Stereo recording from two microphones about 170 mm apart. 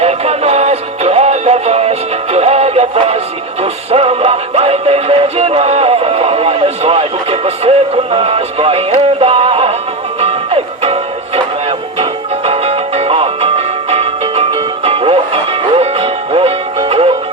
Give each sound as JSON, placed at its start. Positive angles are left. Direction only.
{"t": 0.0, "sound": "music", "side_deg": -40}
{"t": 12.5, "sound": "music", "side_deg": -40}